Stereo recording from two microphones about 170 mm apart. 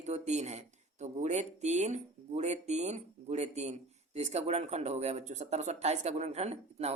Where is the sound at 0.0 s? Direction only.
40° right (ahead or behind).